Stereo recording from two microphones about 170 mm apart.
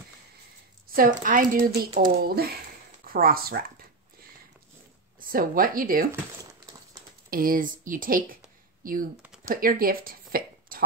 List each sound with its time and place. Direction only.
0.9 s speech: 55° right (ahead or behind)
5.3 s speech: 55° right (ahead or behind)
7.2 s speech: 60° right (ahead or behind)